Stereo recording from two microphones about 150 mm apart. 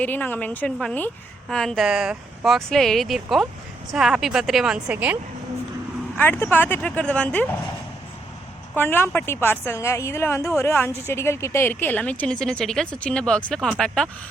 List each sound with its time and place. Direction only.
0.0 s a woman's voice: 10° left (ahead or behind); by 5.1 s 10° right (ahead or behind)
6.1 s a woman's voice: 15° left (ahead or behind)
8.7 s a woman's voice: 15° left (ahead or behind)